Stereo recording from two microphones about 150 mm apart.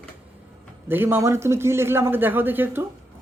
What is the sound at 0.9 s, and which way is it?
A man's voice, 15° right (ahead or behind).